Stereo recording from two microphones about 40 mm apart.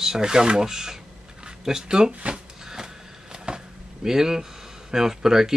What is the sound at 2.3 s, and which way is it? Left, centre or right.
Shuffling cards, centre.